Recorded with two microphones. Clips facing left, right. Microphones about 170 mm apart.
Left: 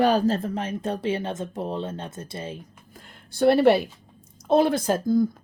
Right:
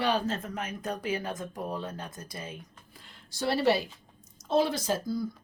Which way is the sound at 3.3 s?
55° left (ahead or behind).